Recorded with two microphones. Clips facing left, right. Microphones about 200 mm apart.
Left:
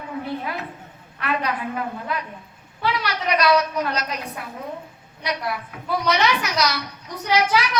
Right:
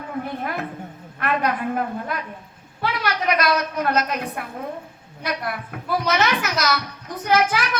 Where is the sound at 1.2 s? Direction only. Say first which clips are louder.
Right 3 dB; 50° right (ahead or behind).